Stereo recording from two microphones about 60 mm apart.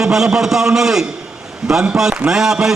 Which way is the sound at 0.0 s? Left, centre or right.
Centre.